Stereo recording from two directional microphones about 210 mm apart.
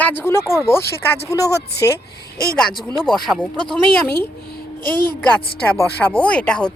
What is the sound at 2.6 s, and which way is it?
Speech, 5° left (ahead or behind).